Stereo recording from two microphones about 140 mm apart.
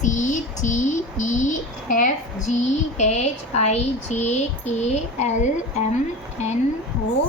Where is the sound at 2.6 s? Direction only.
55° left (ahead or behind).